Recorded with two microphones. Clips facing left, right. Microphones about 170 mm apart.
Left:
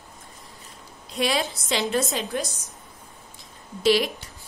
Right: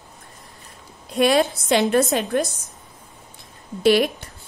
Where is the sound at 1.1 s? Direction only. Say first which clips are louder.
Right 8 dB; 55° right (ahead or behind).